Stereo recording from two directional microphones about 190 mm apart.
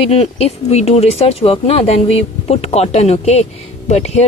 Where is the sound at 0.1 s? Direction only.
30° left (ahead or behind).